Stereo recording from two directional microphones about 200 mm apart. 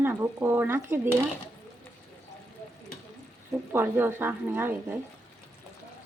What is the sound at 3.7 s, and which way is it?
Speech, 10° right (ahead or behind).